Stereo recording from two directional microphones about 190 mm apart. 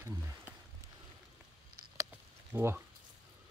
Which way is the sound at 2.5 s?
10° right (ahead or behind).